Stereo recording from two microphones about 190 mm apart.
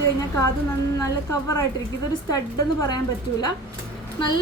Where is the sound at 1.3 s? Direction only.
15° left (ahead or behind).